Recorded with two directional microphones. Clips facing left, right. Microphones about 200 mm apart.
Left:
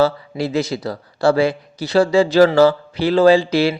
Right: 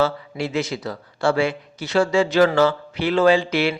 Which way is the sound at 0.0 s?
35° left (ahead or behind).